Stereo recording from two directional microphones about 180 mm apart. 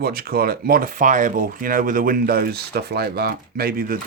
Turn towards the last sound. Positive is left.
turn(degrees=-55)  # may be behind; listen again after turning